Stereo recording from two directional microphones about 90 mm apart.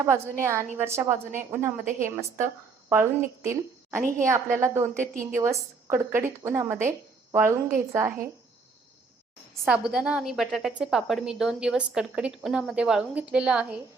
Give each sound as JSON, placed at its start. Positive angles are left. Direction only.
{"t": 0.0, "sound": "a woman's voice", "side_deg": -30}
{"t": 9.6, "sound": "a woman's voice", "side_deg": -10}